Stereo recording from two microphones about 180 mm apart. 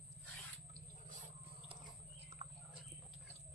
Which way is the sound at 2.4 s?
35° right (ahead or behind).